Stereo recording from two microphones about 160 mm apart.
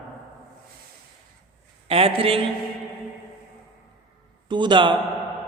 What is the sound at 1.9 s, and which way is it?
Speech, 35° right (ahead or behind).